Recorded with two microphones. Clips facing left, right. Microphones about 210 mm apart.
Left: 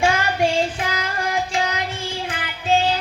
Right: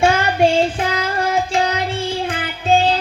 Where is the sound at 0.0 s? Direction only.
35° right (ahead or behind).